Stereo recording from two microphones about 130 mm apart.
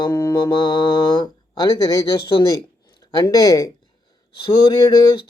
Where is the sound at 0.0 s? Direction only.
30° left (ahead or behind).